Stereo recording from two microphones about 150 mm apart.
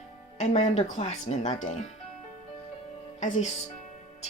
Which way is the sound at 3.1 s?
55° left (ahead or behind).